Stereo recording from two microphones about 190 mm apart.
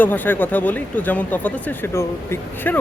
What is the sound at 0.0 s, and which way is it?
Speech, 10° left (ahead or behind).